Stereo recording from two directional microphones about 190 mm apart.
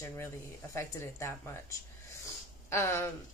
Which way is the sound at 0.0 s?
15° left (ahead or behind).